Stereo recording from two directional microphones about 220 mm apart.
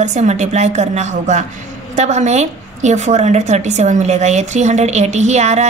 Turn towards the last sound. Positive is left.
turn(degrees=-30)  # may be behind; listen again after turning